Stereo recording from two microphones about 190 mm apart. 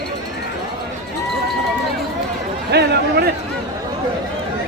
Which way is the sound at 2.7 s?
60° right (ahead or behind).